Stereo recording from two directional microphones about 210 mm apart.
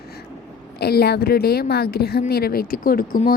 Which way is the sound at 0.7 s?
50° left (ahead or behind).